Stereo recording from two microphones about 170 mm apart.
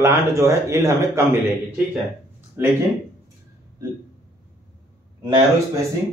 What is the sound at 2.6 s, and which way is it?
Speech, 15° right (ahead or behind).